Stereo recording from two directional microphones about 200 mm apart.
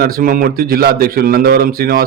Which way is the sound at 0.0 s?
45° right (ahead or behind).